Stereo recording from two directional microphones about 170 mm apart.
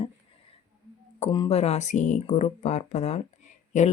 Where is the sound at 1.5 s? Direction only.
40° left (ahead or behind).